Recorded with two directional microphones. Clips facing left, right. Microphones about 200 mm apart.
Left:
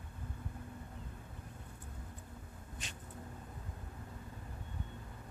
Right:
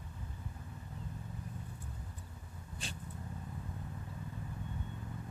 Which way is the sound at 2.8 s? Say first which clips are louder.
Right 7 dB; 30° right (ahead or behind).